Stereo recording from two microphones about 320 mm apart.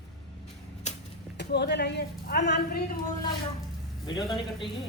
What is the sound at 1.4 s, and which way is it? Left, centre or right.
Speech, left.